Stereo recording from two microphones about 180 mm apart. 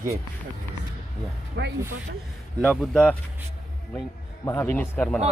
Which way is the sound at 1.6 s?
85° right.